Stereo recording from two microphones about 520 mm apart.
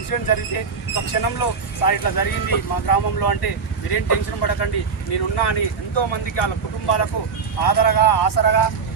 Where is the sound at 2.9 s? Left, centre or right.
Left.